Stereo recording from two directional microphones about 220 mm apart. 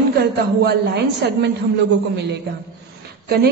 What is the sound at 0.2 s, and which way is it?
A woman's voice, 45° right (ahead or behind).